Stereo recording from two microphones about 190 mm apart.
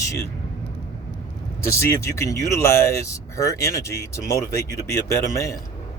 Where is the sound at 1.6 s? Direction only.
15° left (ahead or behind).